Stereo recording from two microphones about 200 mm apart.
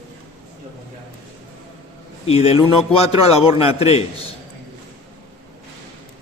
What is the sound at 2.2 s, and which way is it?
A man's voice, 30° left (ahead or behind).